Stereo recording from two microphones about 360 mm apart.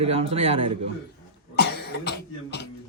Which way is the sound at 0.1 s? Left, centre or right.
Centre.